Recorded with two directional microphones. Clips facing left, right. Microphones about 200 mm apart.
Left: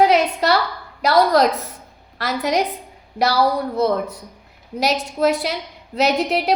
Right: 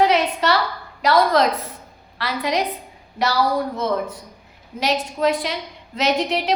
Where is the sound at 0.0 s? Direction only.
40° left (ahead or behind).